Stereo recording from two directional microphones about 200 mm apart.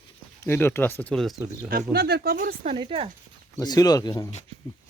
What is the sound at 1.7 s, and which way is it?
Speech, 50° right (ahead or behind).